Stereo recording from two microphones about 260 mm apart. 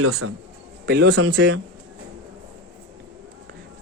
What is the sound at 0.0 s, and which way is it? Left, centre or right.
Speech, right.